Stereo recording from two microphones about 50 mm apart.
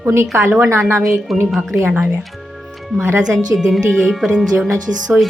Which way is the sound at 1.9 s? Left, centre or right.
Right.